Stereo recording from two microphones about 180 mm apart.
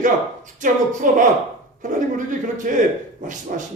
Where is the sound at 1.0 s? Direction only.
50° right (ahead or behind).